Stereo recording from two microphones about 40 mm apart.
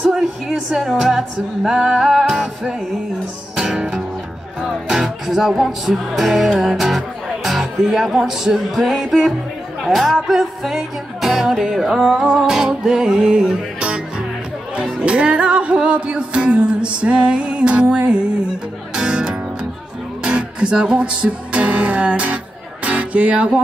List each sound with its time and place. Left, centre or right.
0.0 s music: centre
1.7 s singing: centre
2.0 s music: centre
3.5 s music: centre
4.6 s speech: centre
5.5 s music: centre; by 23.6 s right